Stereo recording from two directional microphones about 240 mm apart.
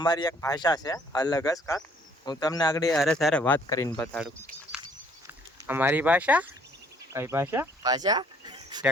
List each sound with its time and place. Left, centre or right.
0.0 s speech: centre
2.9 s speech: centre